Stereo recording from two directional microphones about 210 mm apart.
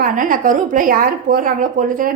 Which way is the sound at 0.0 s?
40° right (ahead or behind).